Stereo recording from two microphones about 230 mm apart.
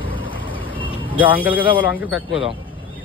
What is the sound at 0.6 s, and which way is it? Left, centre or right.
Vehicle, centre.